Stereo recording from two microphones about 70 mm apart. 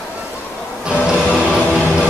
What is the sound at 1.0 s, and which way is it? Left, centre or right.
Music, centre.